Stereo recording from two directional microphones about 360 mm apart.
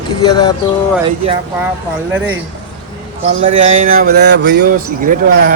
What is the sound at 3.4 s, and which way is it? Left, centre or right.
A man's voice, right.